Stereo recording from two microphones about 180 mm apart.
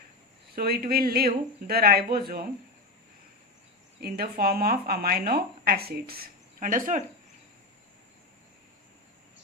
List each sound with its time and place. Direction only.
0.5 s a woman's voice: 55° right (ahead or behind)
4.0 s a woman's voice: 60° right (ahead or behind)